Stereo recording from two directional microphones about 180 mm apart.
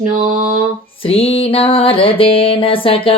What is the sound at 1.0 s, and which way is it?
Music, 30° left (ahead or behind).